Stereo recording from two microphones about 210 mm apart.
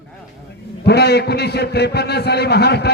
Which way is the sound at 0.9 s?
50° left (ahead or behind).